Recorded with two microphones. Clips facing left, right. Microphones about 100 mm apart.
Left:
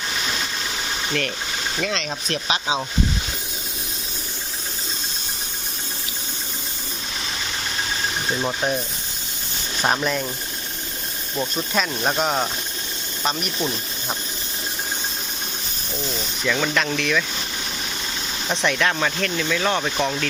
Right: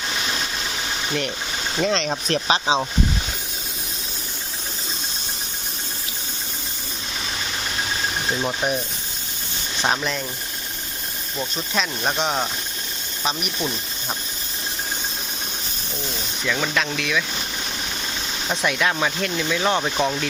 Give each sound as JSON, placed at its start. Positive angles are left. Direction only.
{"t": 1.8, "sound": "speech", "side_deg": -35}
{"t": 8.3, "sound": "speech", "side_deg": 0}
{"t": 9.8, "sound": "speech", "side_deg": 5}
{"t": 11.3, "sound": "speech", "side_deg": 5}
{"t": 16.4, "sound": "speech", "side_deg": 0}
{"t": 18.4, "sound": "speech", "side_deg": -5}